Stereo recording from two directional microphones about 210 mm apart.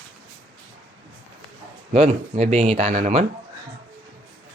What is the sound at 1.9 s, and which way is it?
Speech, 30° right (ahead or behind).